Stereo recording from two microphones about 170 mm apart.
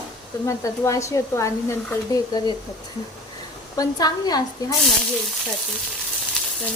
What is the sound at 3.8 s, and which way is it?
Speech, 25° left (ahead or behind).